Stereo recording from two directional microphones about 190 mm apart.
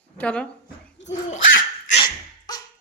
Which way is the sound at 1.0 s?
70° left (ahead or behind).